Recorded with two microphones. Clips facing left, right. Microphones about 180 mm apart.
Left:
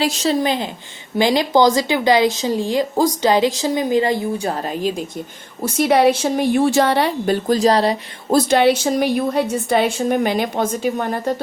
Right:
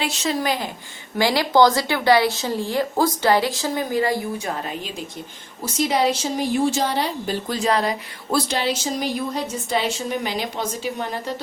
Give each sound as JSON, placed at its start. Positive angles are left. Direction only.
{"t": 0.3, "sound": "a woman's voice", "side_deg": 25}
{"t": 4.4, "sound": "a woman's voice", "side_deg": 35}
{"t": 5.6, "sound": "a woman's voice", "side_deg": 60}
{"t": 7.4, "sound": "speech", "side_deg": 40}